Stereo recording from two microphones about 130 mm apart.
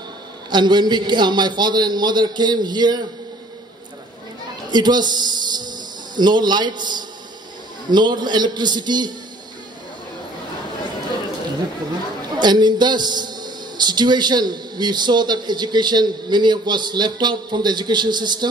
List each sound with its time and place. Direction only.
0.5 s a man's voice: 35° right (ahead or behind)
4.6 s a man's voice: 35° right (ahead or behind)
12.4 s a man's voice: 35° right (ahead or behind)